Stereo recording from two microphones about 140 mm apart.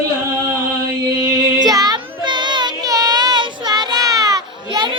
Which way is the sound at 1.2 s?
25° right (ahead or behind).